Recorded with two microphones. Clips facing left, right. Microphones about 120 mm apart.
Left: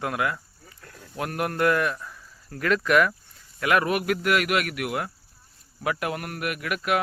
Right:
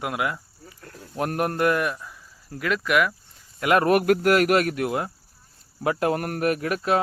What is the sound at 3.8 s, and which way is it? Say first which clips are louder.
A man's voice: right 6 dB; 45° right (ahead or behind).